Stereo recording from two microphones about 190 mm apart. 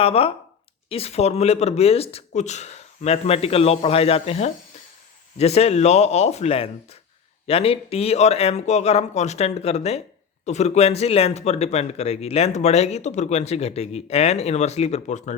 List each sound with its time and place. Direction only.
0.0 s speech: 30° left (ahead or behind)